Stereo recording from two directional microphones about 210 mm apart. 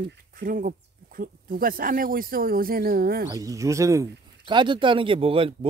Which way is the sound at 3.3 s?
15° right (ahead or behind).